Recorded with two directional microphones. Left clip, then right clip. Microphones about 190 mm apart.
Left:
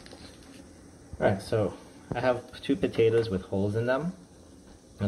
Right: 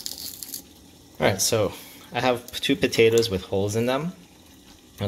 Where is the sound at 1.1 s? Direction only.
50° right (ahead or behind).